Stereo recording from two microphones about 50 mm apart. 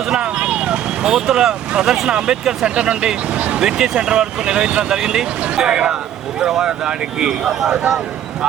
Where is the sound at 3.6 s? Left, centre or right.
Centre.